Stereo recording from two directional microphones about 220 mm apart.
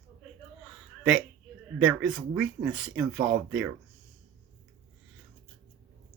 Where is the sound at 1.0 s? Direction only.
5° right (ahead or behind).